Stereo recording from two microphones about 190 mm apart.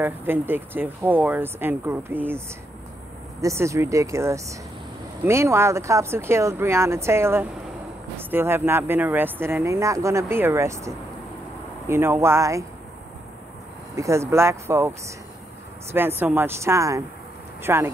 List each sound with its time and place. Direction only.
0.0 s speech: 10° right (ahead or behind)
13.9 s speech: 15° right (ahead or behind)